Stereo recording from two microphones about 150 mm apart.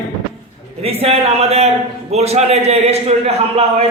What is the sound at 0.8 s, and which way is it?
A man's voice, 40° right (ahead or behind).